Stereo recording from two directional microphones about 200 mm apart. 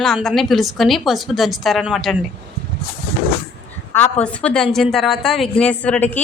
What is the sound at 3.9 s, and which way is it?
A woman's voice, 10° left (ahead or behind).